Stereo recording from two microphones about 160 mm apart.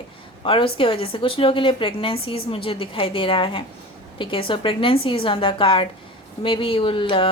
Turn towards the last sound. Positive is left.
turn(degrees=35)  # may be behind; listen again after turning